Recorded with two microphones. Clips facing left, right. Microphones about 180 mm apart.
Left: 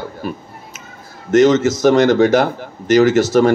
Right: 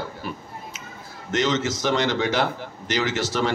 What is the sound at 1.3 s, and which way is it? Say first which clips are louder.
A man's voice: left 12 dB; 45° left (ahead or behind).